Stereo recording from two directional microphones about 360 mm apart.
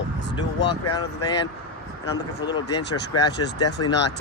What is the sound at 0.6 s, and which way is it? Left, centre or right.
Speech, left.